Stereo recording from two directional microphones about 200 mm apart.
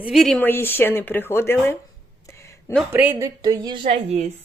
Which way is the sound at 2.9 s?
10° right (ahead or behind).